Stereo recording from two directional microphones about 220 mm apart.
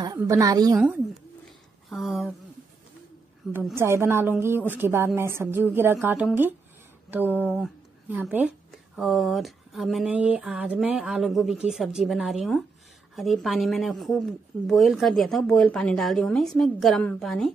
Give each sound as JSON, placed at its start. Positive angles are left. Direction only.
{"t": 0.2, "sound": "speech", "side_deg": -15}
{"t": 1.9, "sound": "speech", "side_deg": 0}
{"t": 3.5, "sound": "speech", "side_deg": -10}